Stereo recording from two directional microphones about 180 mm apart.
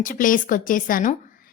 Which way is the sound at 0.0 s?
50° left (ahead or behind).